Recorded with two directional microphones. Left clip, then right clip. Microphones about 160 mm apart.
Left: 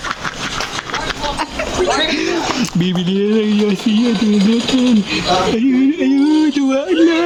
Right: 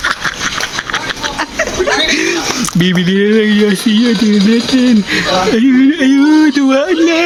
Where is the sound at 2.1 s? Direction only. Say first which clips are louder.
Right 5 dB; 5° right (ahead or behind).